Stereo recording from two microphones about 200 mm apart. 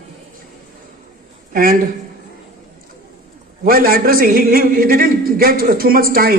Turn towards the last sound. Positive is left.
turn(degrees=-45)  # may be behind; listen again after turning